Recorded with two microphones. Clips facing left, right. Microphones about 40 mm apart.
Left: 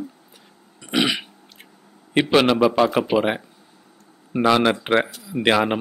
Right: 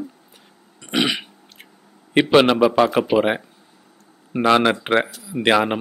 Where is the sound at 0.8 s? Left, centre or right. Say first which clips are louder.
Even; centre.